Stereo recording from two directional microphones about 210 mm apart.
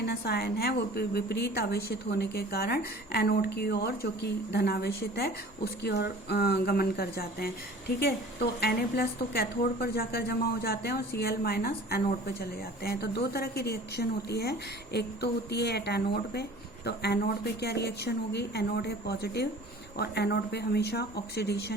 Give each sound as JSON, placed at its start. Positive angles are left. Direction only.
{"t": 0.0, "sound": "a woman's voice", "side_deg": 50}